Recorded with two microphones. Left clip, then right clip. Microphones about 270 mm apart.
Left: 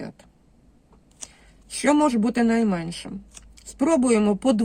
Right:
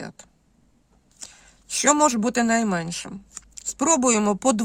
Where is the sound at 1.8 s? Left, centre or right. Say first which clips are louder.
Right 1 dB; right.